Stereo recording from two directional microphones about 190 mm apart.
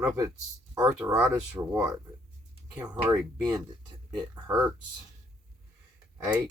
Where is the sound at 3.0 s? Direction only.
20° right (ahead or behind).